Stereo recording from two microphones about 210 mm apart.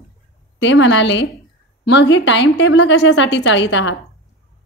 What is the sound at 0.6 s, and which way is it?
A woman's voice, 60° left (ahead or behind).